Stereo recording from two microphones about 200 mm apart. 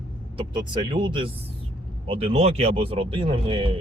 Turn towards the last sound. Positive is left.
turn(degrees=-25)  # may be behind; listen again after turning